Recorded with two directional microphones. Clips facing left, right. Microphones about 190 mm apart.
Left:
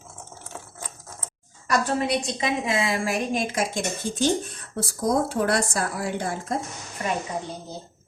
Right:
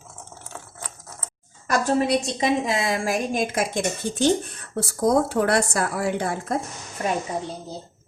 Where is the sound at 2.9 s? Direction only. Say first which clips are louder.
Right 1 dB; 50° right (ahead or behind).